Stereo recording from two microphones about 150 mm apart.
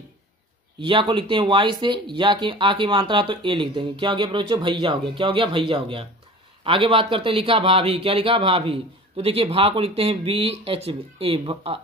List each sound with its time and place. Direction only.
0.7 s speech: 35° right (ahead or behind)